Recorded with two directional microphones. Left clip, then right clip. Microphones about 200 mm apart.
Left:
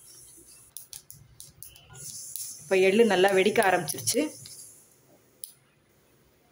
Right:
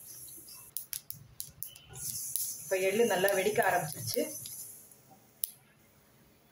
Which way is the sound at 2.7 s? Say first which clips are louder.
Left 7 dB; 45° left (ahead or behind).